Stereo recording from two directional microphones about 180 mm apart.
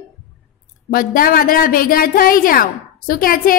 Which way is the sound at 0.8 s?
55° left (ahead or behind).